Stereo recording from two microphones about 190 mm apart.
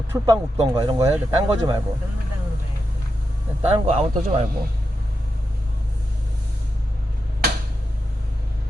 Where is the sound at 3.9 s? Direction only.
30° right (ahead or behind).